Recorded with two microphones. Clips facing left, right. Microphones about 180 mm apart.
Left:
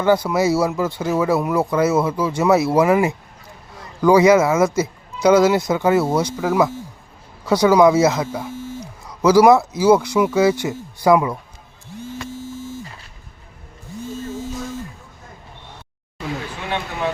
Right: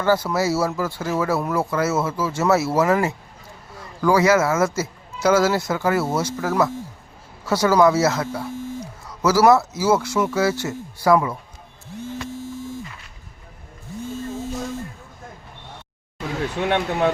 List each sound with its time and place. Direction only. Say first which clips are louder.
0.0 s speech: left 3 dB; 15° left (ahead or behind)